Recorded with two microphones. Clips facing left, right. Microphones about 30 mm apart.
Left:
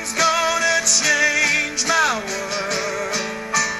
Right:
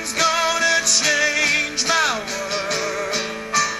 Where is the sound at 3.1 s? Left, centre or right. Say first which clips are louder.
Even; right.